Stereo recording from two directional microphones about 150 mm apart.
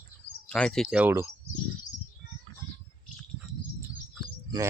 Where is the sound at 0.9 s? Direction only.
10° right (ahead or behind).